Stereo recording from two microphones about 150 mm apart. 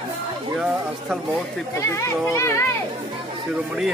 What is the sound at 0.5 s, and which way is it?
Speech, 5° right (ahead or behind).